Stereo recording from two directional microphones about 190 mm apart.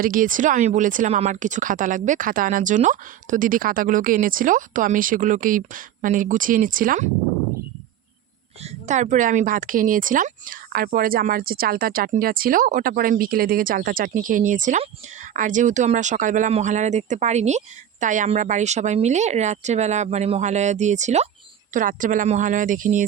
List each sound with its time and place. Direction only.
0.0 s speech: 45° right (ahead or behind)
8.6 s speech: 40° right (ahead or behind)